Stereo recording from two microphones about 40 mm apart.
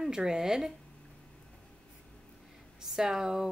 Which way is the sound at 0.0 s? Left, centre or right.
Centre.